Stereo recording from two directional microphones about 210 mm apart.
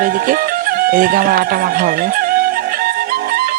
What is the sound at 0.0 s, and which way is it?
Music, 40° right (ahead or behind).